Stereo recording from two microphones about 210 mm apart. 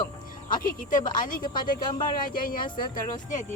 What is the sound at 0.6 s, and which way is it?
A woman's voice, 40° left (ahead or behind).